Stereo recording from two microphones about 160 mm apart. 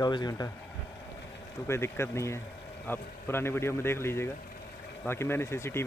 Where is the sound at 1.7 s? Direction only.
15° left (ahead or behind).